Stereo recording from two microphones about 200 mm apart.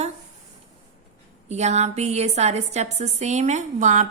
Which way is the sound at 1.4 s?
35° right (ahead or behind).